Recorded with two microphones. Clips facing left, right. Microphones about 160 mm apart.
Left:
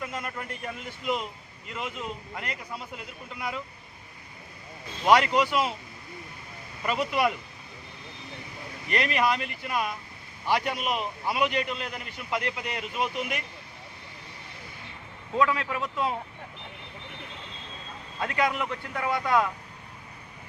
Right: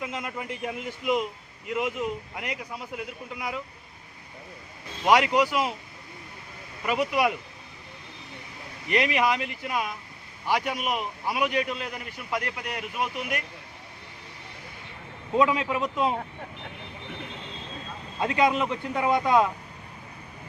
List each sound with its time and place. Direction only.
0.0 s a man's voice: 15° right (ahead or behind)
5.0 s a man's voice: 10° right (ahead or behind)
6.8 s a man's voice: 10° right (ahead or behind)
9.1 s a man's voice: 15° right (ahead or behind)
15.3 s speech: 20° right (ahead or behind)
18.2 s speech: 20° right (ahead or behind)